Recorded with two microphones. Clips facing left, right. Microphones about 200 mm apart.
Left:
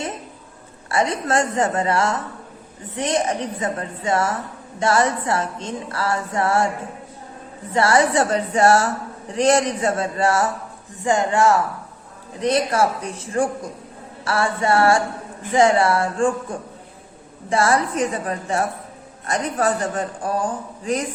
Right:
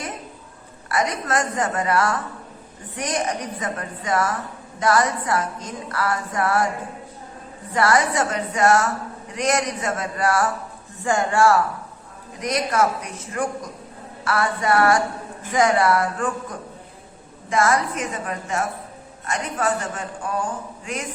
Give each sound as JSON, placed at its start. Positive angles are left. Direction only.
{"t": 0.9, "sound": "speech", "side_deg": 30}
{"t": 7.7, "sound": "speech", "side_deg": 25}